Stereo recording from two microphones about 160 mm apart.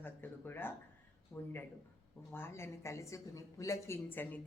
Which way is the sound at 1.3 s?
5° left (ahead or behind).